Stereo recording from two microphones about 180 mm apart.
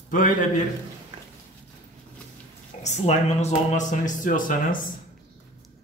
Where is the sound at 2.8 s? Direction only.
40° left (ahead or behind).